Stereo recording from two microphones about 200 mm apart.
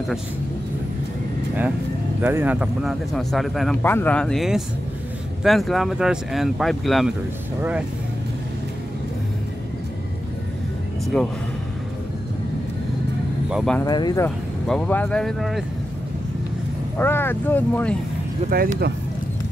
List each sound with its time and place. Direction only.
2.2 s a man's voice: 10° right (ahead or behind)
13.5 s speech: centre (ahead or behind)
13.7 s speech: 20° left (ahead or behind)
14.7 s a man's voice: 5° left (ahead or behind)
17.0 s speech: 10° left (ahead or behind)
18.5 s speech: 50° right (ahead or behind)